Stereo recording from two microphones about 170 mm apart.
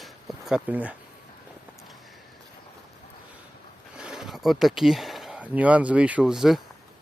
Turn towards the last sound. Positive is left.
turn(degrees=0)  # may be behind; listen again after turning